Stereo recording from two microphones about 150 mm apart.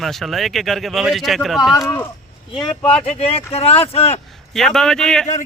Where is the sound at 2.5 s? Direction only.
35° left (ahead or behind).